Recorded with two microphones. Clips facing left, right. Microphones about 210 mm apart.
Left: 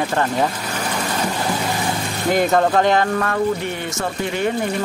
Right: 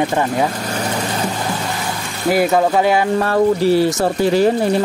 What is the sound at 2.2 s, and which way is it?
Speech, 5° right (ahead or behind).